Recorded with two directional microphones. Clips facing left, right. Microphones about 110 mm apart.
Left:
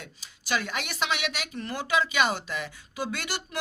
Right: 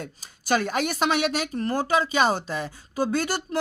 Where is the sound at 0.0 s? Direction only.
45° right (ahead or behind).